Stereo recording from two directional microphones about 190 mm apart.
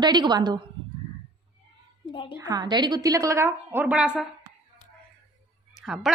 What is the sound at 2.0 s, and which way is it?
Speech, 25° left (ahead or behind).